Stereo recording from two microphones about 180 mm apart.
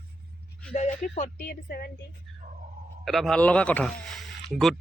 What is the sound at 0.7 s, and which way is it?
Music, 40° left (ahead or behind).